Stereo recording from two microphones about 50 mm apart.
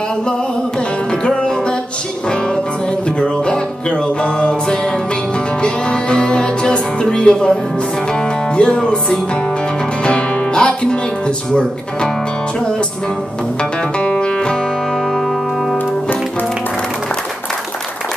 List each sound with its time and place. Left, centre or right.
1.2 s music: left
3.2 s music: left
10.0 s speech: left
13.9 s music: left